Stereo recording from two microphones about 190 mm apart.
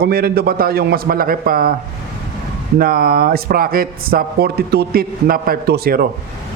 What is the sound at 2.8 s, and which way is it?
A man's voice, 50° right (ahead or behind).